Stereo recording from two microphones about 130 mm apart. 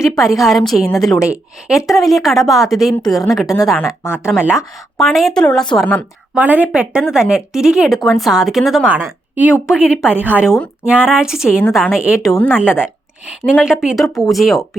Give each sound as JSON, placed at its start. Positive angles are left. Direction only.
{"t": 0.2, "sound": "speech", "side_deg": 0}
{"t": 3.4, "sound": "speech", "side_deg": 25}
{"t": 4.4, "sound": "speech", "side_deg": 0}
{"t": 6.3, "sound": "a woman's voice", "side_deg": -10}
{"t": 8.9, "sound": "a woman's voice", "side_deg": -15}